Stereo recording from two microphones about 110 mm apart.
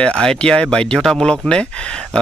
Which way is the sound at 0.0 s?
5° left (ahead or behind).